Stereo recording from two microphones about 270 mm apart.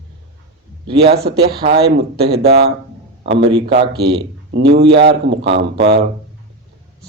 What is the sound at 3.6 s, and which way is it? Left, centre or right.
Speech, centre.